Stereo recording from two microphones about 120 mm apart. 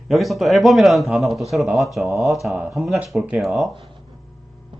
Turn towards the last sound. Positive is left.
turn(degrees=0)  # may be behind; listen again after turning